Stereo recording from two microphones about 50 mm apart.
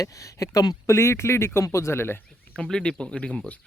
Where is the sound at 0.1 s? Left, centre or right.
Left.